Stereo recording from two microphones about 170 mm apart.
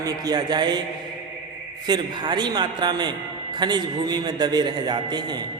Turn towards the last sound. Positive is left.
turn(degrees=-25)  # may be behind; listen again after turning